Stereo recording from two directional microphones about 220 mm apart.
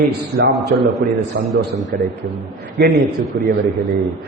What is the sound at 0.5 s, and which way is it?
Speech, centre (ahead or behind).